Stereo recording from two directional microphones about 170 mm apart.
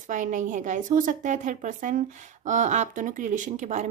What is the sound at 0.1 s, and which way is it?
A woman's voice, 50° right (ahead or behind).